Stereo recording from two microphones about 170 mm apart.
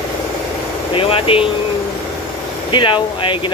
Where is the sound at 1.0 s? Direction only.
35° left (ahead or behind).